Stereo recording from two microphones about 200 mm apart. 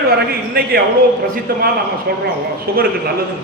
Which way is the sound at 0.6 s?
45° right (ahead or behind).